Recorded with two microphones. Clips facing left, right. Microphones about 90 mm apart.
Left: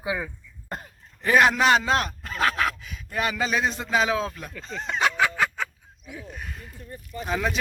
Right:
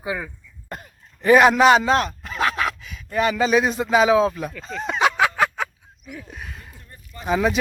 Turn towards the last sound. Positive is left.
turn(degrees=-5)  # may be behind; listen again after turning